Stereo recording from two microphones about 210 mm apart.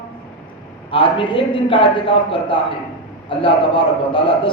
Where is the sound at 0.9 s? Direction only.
25° left (ahead or behind).